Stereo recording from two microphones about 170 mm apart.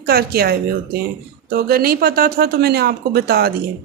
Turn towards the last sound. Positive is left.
turn(degrees=-65)  # may be behind; listen again after turning